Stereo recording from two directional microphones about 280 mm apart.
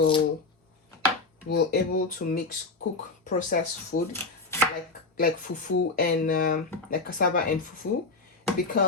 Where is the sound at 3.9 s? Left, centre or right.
Left.